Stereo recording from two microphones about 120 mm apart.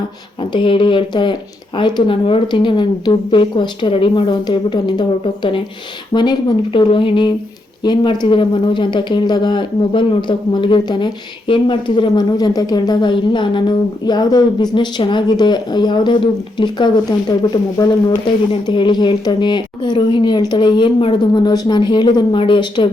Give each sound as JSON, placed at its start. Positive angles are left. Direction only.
{"t": 0.5, "sound": "speech", "side_deg": 45}
{"t": 6.1, "sound": "speech", "side_deg": 25}
{"t": 6.7, "sound": "speech", "side_deg": 45}